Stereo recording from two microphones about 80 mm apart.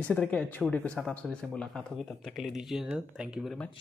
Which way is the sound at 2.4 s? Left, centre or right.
Centre.